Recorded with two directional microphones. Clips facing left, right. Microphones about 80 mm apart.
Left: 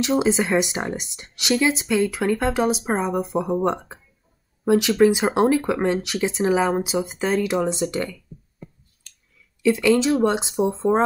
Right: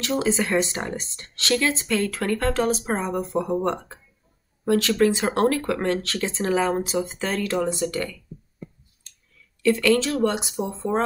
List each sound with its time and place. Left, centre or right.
0.0 s speech: left; by 4.0 s centre
4.6 s speech: centre
9.6 s speech: centre
10.2 s speech: left